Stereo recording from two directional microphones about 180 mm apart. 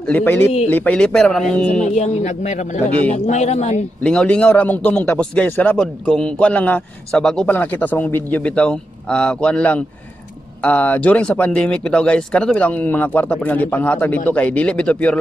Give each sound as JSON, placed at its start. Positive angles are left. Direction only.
{"t": 0.1, "sound": "a man's voice", "side_deg": 10}
{"t": 2.0, "sound": "speech", "side_deg": 40}
{"t": 4.0, "sound": "a man's voice", "side_deg": 5}